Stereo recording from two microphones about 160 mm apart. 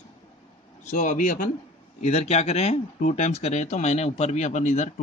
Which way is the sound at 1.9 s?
45° left (ahead or behind).